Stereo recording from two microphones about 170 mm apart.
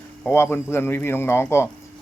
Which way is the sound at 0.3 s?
15° left (ahead or behind).